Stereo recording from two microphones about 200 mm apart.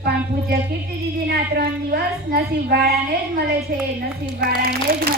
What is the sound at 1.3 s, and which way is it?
A woman's voice, 50° right (ahead or behind).